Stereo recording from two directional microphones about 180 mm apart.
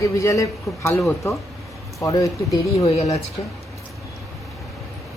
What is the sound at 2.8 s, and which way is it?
Speech, 35° left (ahead or behind).